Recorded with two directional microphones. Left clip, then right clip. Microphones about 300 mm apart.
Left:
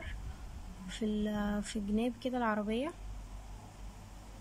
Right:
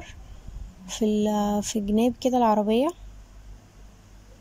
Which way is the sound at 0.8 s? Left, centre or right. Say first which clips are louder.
Right 13 dB; centre.